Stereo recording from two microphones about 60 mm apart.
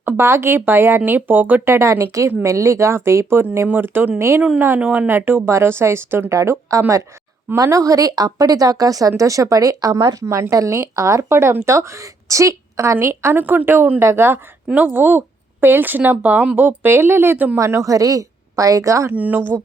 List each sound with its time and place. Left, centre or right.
0.2 s speech: right
1.7 s a woman's voice: right
3.7 s speech: right
4.8 s speech: right
5.0 s a woman's voice: right
6.3 s a woman's voice: right
13.0 s a woman's voice: right
13.3 s a woman's voice: right
14.8 s speech: right
17.6 s a woman's voice: right
19.1 s speech: right